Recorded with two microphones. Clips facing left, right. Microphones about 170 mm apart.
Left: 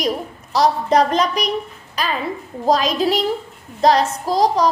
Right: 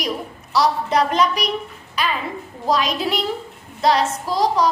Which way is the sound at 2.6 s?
40° left (ahead or behind).